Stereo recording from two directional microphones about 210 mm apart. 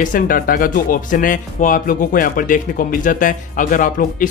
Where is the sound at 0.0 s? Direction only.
40° left (ahead or behind).